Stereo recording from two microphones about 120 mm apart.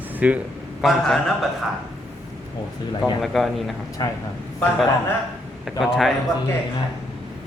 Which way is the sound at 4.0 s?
35° left (ahead or behind).